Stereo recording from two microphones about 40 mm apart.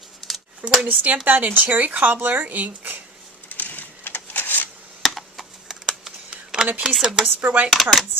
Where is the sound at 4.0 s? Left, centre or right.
Left.